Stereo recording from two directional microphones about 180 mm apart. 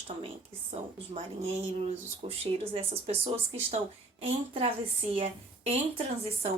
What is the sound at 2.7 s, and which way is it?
Speech, 30° right (ahead or behind).